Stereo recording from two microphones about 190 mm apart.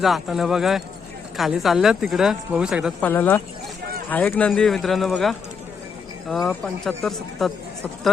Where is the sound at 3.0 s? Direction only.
10° left (ahead or behind).